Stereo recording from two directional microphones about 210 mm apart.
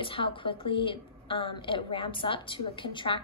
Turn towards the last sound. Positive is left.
turn(degrees=20)  # may be behind; listen again after turning